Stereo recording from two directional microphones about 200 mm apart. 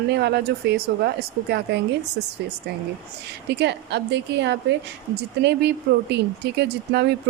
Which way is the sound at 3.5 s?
60° right (ahead or behind).